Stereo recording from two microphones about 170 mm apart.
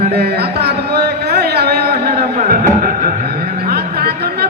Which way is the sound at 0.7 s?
70° right (ahead or behind).